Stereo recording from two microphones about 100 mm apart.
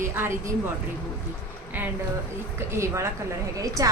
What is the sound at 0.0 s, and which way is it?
Speech, 25° right (ahead or behind).